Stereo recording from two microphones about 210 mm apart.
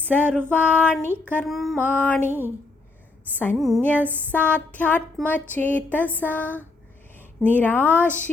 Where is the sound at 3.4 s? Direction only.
5° left (ahead or behind).